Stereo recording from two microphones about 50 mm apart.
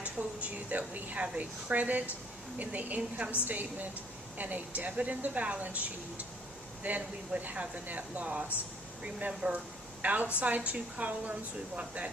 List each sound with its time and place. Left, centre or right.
0.0 s a woman's voice: right